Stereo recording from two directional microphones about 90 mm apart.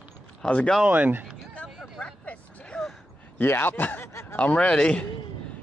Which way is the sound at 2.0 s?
15° left (ahead or behind).